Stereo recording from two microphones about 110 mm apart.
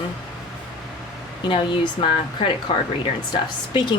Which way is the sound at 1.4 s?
50° left (ahead or behind).